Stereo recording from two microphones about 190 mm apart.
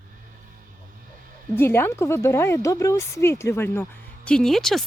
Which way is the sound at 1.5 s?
10° left (ahead or behind).